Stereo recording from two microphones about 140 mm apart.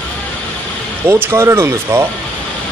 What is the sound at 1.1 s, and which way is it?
Speech, 15° right (ahead or behind).